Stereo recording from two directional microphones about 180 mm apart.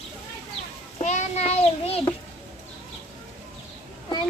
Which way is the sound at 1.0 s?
40° left (ahead or behind).